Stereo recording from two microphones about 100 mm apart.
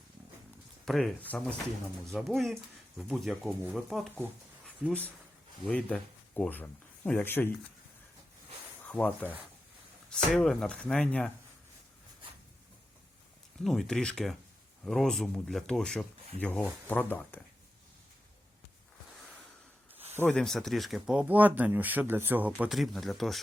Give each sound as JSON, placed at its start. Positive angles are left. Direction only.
{"t": 0.9, "sound": "speech", "side_deg": 0}
{"t": 1.3, "sound": "speech", "side_deg": 15}
{"t": 2.1, "sound": "speech", "side_deg": 5}
{"t": 5.6, "sound": "speech", "side_deg": 10}
{"t": 8.9, "sound": "speech", "side_deg": 15}
{"t": 13.7, "sound": "speech", "side_deg": 5}
{"t": 20.3, "sound": "speech", "side_deg": 5}
{"t": 21.2, "sound": "speech", "side_deg": -15}
{"t": 22.7, "sound": "speech", "side_deg": 0}